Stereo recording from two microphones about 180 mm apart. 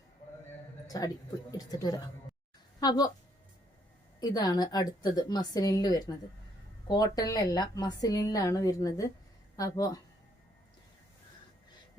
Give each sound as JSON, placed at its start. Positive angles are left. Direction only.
{"t": 0.9, "sound": "a woman's voice", "side_deg": 20}
{"t": 4.2, "sound": "a woman's voice", "side_deg": 20}